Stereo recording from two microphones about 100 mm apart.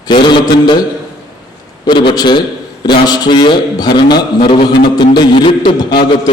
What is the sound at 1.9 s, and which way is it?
A man's voice, 50° left (ahead or behind).